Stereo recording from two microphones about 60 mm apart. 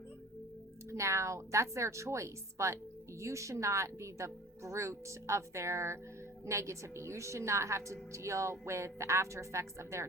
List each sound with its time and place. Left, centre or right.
0.9 s a woman's voice: right